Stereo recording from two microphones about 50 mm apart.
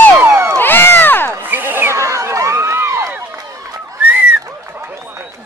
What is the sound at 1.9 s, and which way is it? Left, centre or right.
Crowd, right.